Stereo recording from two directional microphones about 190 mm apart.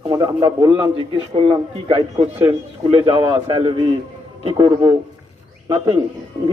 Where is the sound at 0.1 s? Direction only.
20° right (ahead or behind).